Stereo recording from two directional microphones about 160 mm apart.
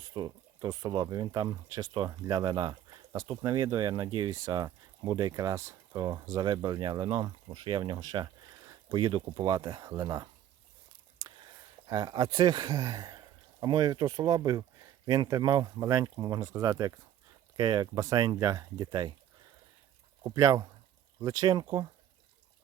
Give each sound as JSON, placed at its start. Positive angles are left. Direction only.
{"t": 0.1, "sound": "speech", "side_deg": -30}
{"t": 11.9, "sound": "speech", "side_deg": -25}
{"t": 20.2, "sound": "speech", "side_deg": -20}